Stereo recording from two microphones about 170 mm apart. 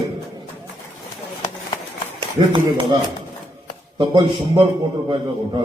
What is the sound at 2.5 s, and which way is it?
A man's voice, 30° right (ahead or behind).